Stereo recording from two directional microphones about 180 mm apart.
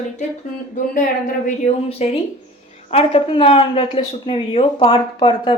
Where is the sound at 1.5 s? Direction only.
35° left (ahead or behind).